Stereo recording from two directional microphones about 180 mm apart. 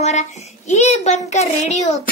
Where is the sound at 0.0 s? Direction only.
40° left (ahead or behind).